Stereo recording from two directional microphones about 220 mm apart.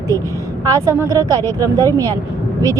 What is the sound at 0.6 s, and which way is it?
Speech, 15° right (ahead or behind).